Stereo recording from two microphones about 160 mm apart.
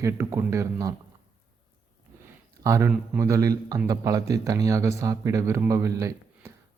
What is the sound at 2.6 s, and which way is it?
Speech, 20° right (ahead or behind).